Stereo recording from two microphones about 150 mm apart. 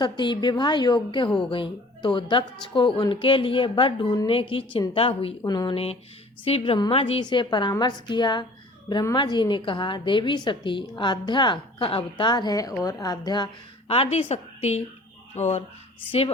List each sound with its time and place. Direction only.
0.0 s a woman's voice: 30° left (ahead or behind)
5.4 s a woman's voice: 25° left (ahead or behind)
5.7 s a woman's voice: 40° left (ahead or behind); by 13.5 s 25° left (ahead or behind)
13.8 s a woman's voice: 40° left (ahead or behind)